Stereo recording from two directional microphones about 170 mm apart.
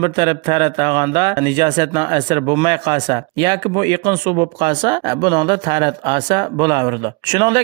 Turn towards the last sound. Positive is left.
turn(degrees=-25)  # may be behind; listen again after turning